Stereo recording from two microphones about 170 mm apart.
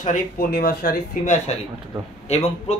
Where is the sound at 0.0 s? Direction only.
55° left (ahead or behind).